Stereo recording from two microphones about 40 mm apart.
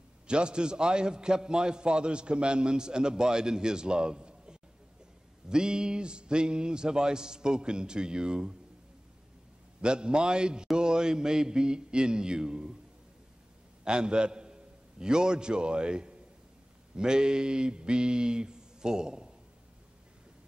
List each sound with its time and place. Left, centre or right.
0.3 s a man's voice: right
9.8 s a man's voice: right
13.8 s a man's voice: right